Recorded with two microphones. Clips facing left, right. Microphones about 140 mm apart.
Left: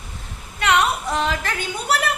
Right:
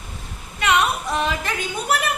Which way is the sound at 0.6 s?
15° right (ahead or behind).